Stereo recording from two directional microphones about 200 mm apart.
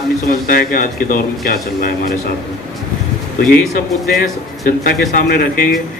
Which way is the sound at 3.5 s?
50° left (ahead or behind).